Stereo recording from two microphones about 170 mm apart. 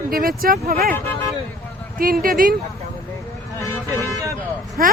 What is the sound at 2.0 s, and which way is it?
Speech, 55° right (ahead or behind).